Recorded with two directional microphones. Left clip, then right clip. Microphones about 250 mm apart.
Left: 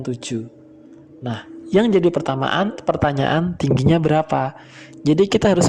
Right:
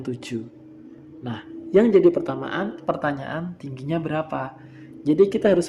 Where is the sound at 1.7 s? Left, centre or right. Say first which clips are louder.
Even; left.